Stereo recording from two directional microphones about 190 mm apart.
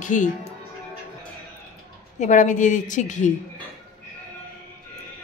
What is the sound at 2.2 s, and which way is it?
A woman's voice, 40° left (ahead or behind).